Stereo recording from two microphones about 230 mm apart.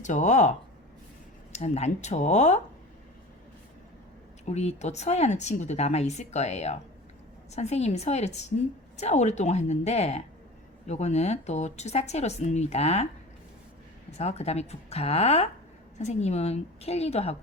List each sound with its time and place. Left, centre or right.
0.0 s speech: left
1.5 s a woman's voice: left
4.4 s a woman's voice: left
14.2 s a woman's voice: left